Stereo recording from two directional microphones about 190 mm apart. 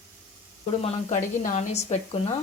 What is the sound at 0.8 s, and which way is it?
Speech, 35° left (ahead or behind).